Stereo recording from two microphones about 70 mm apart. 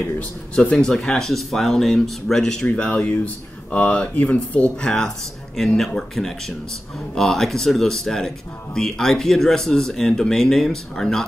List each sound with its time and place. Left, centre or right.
0.6 s speech: centre